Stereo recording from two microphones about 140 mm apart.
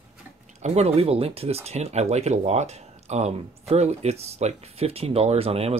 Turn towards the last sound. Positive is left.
turn(degrees=-45)  # may be behind; listen again after turning